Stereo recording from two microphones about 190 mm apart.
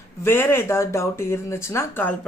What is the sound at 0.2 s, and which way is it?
A woman's voice, 10° left (ahead or behind).